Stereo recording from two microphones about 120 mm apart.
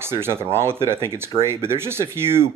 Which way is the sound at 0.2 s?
20° right (ahead or behind).